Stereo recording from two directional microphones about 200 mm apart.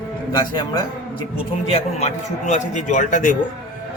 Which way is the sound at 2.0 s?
35° left (ahead or behind).